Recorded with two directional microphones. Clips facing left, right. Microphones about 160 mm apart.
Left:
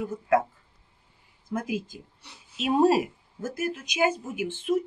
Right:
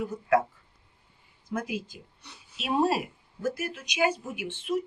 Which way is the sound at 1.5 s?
45° left (ahead or behind).